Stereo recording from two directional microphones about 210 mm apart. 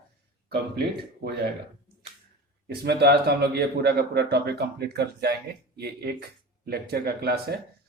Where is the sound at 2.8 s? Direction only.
50° right (ahead or behind).